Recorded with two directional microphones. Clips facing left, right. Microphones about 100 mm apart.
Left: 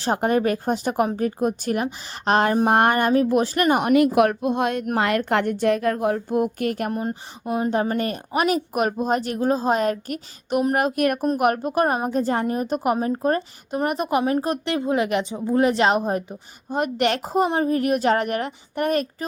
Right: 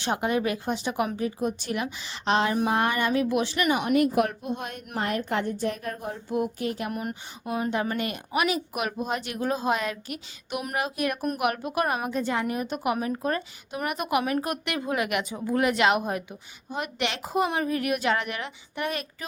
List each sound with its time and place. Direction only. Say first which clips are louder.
0.0 s a woman's voice: left 5 dB; 40° left (ahead or behind)
3.9 s a woman's voice: left 6 dB; 85° left
6.2 s a woman's voice: left 5 dB; 50° left (ahead or behind)
6.9 s a woman's voice: left 6 dB; 30° left (ahead or behind); by 11.2 s 50° left (ahead or behind)
11.2 s a woman's voice: left 7 dB; 40° left (ahead or behind)